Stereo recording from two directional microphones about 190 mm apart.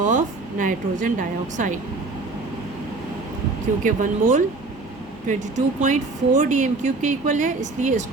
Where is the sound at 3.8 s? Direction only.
45° right (ahead or behind).